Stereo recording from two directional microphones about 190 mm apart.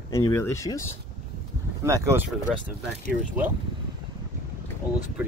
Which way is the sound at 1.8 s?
15° right (ahead or behind).